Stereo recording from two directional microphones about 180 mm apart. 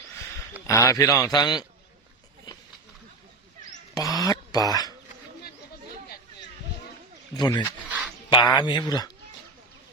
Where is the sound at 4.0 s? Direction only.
20° left (ahead or behind).